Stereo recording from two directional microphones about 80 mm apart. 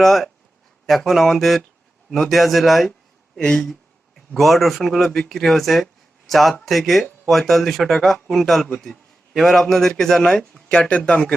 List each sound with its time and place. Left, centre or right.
0.0 s speech: centre
3.3 s a sound: centre
4.4 s speech: centre